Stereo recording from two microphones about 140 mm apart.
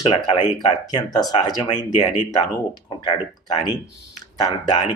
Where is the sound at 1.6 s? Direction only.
60° left (ahead or behind).